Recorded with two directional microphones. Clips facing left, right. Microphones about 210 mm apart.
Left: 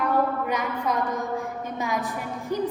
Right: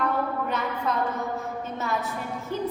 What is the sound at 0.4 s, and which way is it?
Speech, 10° left (ahead or behind).